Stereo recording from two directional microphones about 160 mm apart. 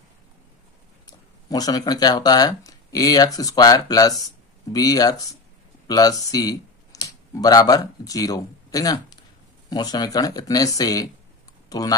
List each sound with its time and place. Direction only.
1.0 s speech: 25° left (ahead or behind)